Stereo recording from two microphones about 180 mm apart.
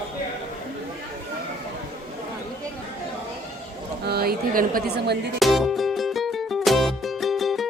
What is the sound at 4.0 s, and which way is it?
A woman's voice, 60° right (ahead or behind).